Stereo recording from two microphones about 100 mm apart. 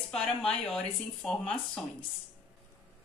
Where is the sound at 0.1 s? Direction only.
5° left (ahead or behind).